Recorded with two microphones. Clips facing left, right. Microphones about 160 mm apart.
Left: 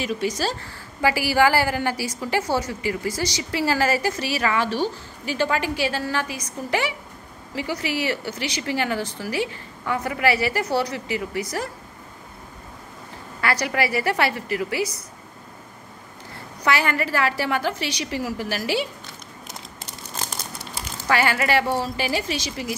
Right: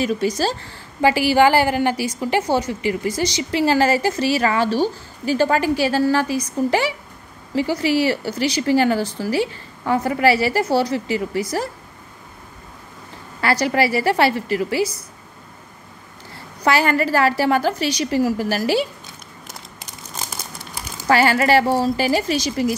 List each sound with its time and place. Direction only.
0.0 s a woman's voice: 40° right (ahead or behind)
13.4 s speech: 30° right (ahead or behind)
16.6 s speech: 35° right (ahead or behind)
21.1 s speech: 35° right (ahead or behind)